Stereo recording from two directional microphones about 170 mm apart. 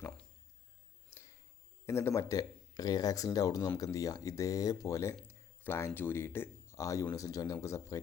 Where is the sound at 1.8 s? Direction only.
15° left (ahead or behind).